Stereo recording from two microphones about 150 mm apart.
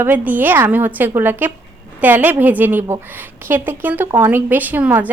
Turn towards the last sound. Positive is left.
turn(degrees=-10)  # may be behind; listen again after turning